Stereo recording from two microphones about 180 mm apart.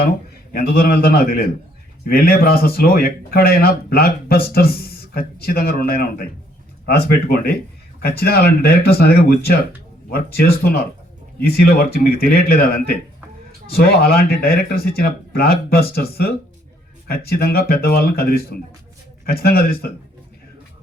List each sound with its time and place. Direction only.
0.5 s speech: 55° left (ahead or behind)